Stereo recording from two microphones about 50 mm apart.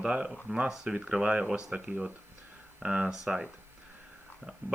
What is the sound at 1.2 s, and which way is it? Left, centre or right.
Speech, right.